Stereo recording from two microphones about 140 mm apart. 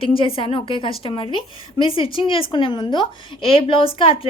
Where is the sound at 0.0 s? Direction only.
40° left (ahead or behind).